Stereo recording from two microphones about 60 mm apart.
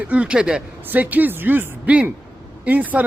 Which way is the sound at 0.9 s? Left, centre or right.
Right.